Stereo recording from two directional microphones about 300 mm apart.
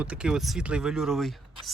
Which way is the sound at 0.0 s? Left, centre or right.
Centre.